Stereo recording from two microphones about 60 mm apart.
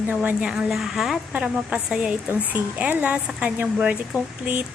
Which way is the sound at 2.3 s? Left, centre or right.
Right.